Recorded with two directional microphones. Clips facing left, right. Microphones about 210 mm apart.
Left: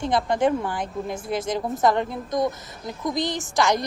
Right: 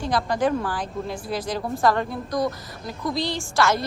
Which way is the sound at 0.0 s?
25° left (ahead or behind).